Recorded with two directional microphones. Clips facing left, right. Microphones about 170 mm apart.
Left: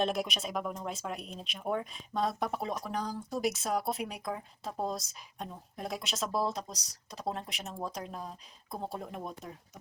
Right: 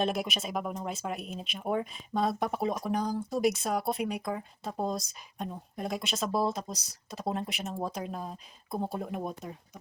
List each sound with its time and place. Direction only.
0.0 s speech: centre (ahead or behind)
2.7 s speech: 15° right (ahead or behind)
3.2 s speech: centre (ahead or behind)